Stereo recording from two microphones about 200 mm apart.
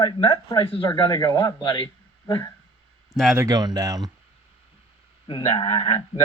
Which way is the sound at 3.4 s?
20° right (ahead or behind).